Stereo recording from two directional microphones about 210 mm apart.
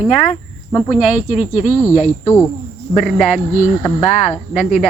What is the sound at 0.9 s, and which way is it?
Speech, 5° right (ahead or behind).